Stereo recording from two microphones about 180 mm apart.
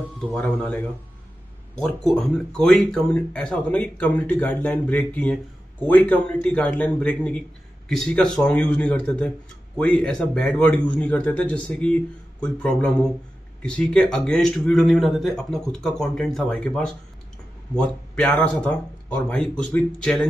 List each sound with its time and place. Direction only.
0.3 s speech: 10° left (ahead or behind)